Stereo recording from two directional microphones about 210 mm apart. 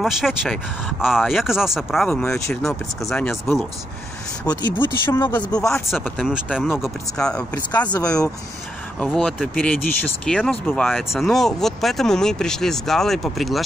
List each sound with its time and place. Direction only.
0.0 s speech: centre (ahead or behind)
4.5 s speech: 20° left (ahead or behind)
5.9 s speech: centre (ahead or behind)
7.9 s speech: 15° left (ahead or behind)
9.0 s speech: 5° left (ahead or behind)